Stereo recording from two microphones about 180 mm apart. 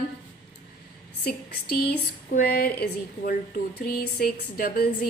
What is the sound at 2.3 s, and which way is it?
A woman's voice, 55° left (ahead or behind).